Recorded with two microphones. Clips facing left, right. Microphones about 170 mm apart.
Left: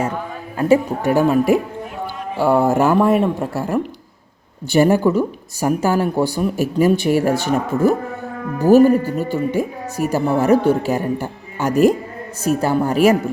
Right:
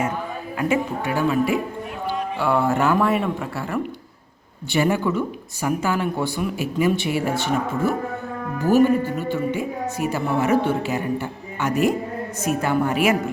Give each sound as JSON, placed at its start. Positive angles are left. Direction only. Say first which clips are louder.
{"t": 0.7, "sound": "a woman's voice", "louder": "left 9 dB", "side_deg": 45}